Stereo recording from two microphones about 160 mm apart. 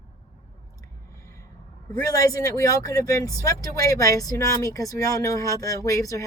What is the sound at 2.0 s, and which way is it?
Speech, 20° left (ahead or behind).